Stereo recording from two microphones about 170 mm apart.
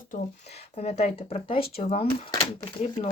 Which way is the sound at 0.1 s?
40° left (ahead or behind).